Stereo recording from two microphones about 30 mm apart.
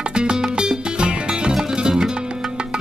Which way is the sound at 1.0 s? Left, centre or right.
Right.